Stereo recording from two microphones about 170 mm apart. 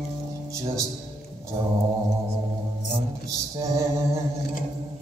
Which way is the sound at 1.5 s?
35° right (ahead or behind).